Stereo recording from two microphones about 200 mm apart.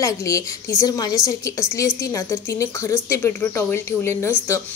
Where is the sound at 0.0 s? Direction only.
15° left (ahead or behind).